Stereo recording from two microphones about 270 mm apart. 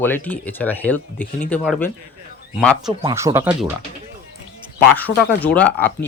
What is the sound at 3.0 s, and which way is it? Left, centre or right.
Speech, centre.